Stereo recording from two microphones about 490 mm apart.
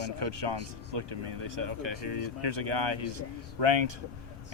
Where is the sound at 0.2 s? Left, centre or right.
Right.